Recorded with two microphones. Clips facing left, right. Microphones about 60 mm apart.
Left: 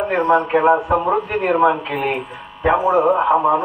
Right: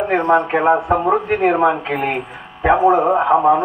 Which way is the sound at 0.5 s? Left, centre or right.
Right.